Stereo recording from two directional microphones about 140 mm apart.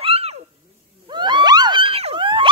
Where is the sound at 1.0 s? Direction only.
35° right (ahead or behind).